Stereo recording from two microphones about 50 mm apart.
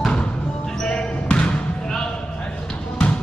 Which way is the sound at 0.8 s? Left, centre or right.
Centre.